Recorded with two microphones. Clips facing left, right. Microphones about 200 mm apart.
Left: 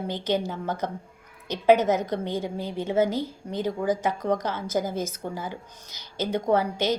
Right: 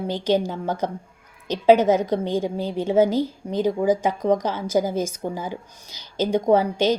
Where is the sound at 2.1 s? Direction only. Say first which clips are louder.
Right 5 dB; 15° right (ahead or behind).